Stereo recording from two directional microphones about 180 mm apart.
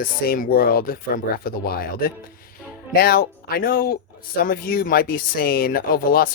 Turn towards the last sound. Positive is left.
turn(degrees=55)  # may be behind; listen again after turning